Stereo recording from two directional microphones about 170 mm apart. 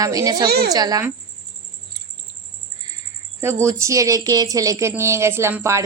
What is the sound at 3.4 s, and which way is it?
Speech, 15° right (ahead or behind).